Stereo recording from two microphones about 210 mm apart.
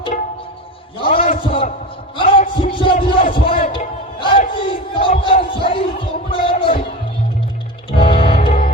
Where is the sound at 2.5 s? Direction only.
25° left (ahead or behind).